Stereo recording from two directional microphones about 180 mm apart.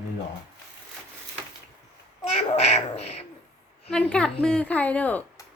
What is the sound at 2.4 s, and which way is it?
Speech, 35° left (ahead or behind).